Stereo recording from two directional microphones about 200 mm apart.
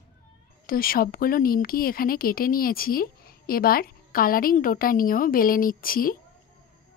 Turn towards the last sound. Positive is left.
turn(degrees=45)  # may be behind; listen again after turning